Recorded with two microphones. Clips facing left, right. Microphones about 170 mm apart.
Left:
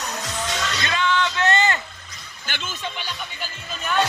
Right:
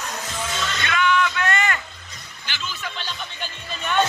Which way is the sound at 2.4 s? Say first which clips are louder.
Left 1 dB; 50° left (ahead or behind).